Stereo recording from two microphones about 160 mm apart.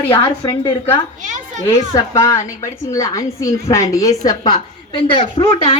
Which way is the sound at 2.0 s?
20° left (ahead or behind).